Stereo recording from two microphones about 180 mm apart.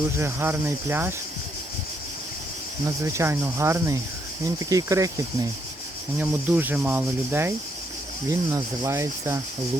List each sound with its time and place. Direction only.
0.2 s speech: 15° right (ahead or behind)
2.8 s speech: 15° right (ahead or behind)